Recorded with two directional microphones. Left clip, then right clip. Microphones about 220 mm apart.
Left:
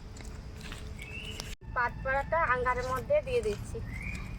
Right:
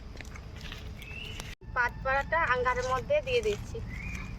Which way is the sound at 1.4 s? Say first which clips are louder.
Right 2 dB; 10° right (ahead or behind).